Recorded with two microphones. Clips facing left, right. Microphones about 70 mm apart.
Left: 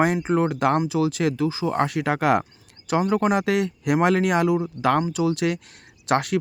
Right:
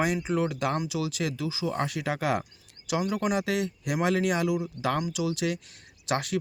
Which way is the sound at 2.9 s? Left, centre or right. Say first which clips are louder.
Left 7 dB; left.